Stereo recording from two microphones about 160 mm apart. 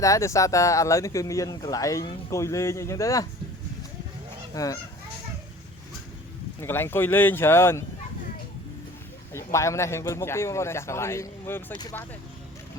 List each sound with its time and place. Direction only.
0.0 s speech: 20° left (ahead or behind)
4.5 s speech: 20° left (ahead or behind)
6.6 s a man's voice: 15° left (ahead or behind)
9.3 s a man's voice: 20° left (ahead or behind)
11.7 s speech: 25° left (ahead or behind)